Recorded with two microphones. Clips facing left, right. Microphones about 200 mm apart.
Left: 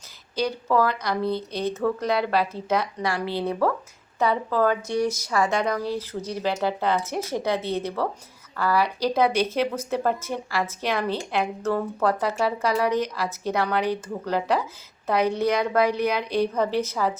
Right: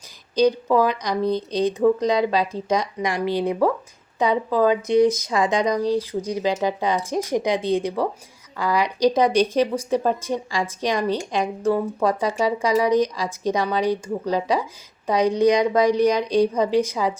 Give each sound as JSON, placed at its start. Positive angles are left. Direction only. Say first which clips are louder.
{"t": 0.3, "sound": "speech", "louder": "right 5 dB", "side_deg": -15}